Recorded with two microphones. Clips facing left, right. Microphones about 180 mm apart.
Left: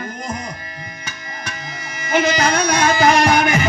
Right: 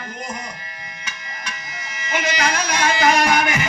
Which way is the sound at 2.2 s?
30° left (ahead or behind).